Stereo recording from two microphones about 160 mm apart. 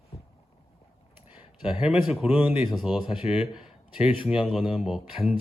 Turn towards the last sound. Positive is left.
turn(degrees=0)  # may be behind; listen again after turning